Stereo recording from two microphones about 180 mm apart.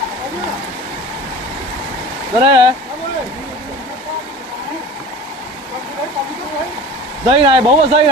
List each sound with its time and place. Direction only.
2.4 s speech: 25° right (ahead or behind)
7.3 s speech: 30° right (ahead or behind)